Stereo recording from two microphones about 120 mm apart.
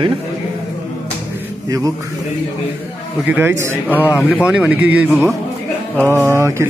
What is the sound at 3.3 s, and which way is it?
Speech, 15° right (ahead or behind).